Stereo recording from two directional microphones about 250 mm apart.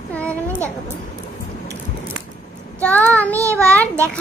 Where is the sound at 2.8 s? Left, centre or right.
Centre.